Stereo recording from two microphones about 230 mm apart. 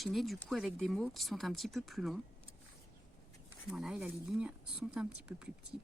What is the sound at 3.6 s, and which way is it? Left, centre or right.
Speech, centre.